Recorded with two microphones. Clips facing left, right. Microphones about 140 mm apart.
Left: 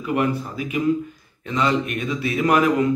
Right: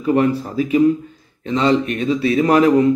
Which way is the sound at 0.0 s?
30° right (ahead or behind).